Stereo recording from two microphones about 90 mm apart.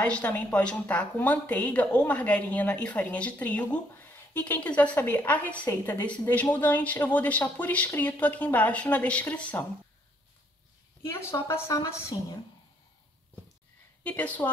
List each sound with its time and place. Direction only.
0.0 s a woman's voice: 15° left (ahead or behind)
11.1 s speech: 30° left (ahead or behind)
14.0 s a woman's voice: 15° left (ahead or behind)